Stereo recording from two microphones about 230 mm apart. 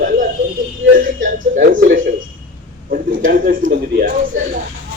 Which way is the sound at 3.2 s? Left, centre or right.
Right.